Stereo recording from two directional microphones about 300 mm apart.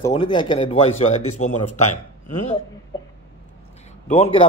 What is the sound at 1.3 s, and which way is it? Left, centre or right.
Speech, left.